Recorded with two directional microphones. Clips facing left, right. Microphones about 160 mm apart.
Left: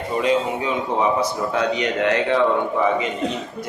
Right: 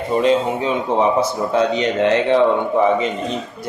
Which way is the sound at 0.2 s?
30° right (ahead or behind).